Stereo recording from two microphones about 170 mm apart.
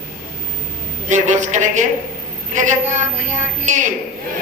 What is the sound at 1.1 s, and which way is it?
A man's voice, 45° right (ahead or behind).